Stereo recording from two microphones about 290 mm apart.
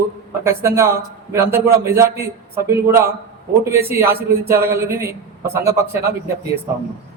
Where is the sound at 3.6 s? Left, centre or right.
Centre.